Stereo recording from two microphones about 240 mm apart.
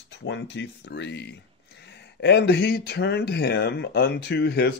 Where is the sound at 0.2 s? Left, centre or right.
Left.